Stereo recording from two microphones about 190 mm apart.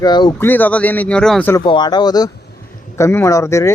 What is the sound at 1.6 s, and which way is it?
Speech, 25° left (ahead or behind).